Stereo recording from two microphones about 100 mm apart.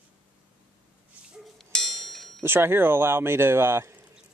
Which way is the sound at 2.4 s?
25° right (ahead or behind).